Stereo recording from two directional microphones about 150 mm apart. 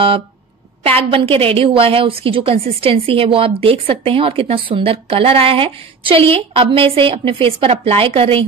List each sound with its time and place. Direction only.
0.8 s a woman's voice: 40° right (ahead or behind)